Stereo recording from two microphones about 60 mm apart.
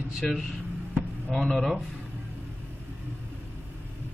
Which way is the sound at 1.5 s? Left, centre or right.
Centre.